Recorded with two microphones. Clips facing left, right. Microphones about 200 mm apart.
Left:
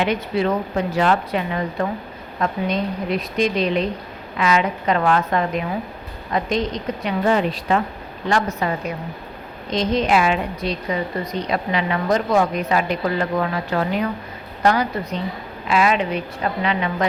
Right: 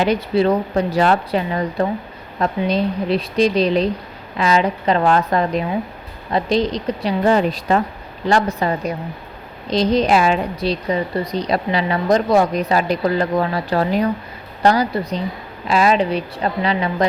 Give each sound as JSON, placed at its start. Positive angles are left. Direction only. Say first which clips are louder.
{"t": 0.0, "sound": "a woman's voice", "louder": "right 4 dB", "side_deg": -35}